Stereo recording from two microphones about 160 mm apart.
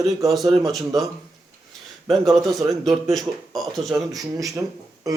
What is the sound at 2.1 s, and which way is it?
Speech, centre (ahead or behind).